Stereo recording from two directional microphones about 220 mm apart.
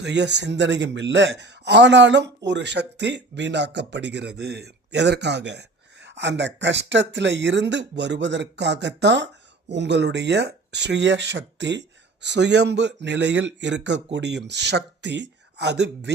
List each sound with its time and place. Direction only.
0.0 s speech: 50° right (ahead or behind)